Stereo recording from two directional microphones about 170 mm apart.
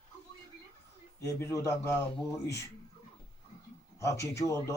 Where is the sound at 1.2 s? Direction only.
15° left (ahead or behind).